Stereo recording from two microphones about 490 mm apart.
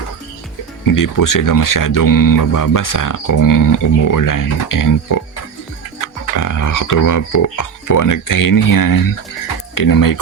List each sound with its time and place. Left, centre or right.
0.9 s speech: left
6.3 s speech: left